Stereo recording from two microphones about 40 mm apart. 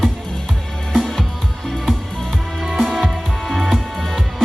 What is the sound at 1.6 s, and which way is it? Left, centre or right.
Music, centre.